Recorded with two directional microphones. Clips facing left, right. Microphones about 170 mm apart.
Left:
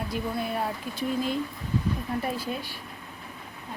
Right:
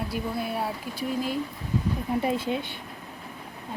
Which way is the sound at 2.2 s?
20° right (ahead or behind).